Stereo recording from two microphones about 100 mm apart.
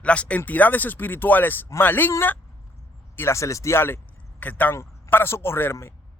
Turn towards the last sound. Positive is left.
turn(degrees=25)  # may be behind; listen again after turning